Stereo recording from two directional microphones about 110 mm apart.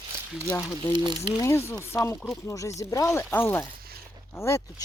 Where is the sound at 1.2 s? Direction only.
25° left (ahead or behind).